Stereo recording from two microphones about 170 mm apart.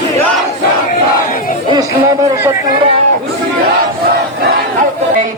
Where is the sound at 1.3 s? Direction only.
55° left (ahead or behind).